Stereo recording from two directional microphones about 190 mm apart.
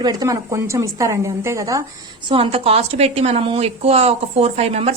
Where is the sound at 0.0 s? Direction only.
20° right (ahead or behind).